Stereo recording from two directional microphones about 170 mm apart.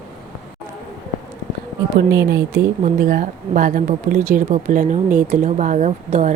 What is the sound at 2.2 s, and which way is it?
Speech, 80° right.